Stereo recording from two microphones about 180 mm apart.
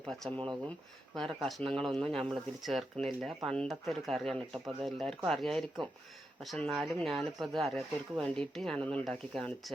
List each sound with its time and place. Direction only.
0.0 s speech: centre (ahead or behind)
0.3 s speech: 25° right (ahead or behind)
1.1 s speech: centre (ahead or behind)